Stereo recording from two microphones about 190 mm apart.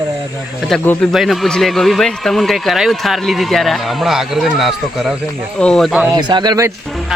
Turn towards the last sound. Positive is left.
turn(degrees=-20)  # may be behind; listen again after turning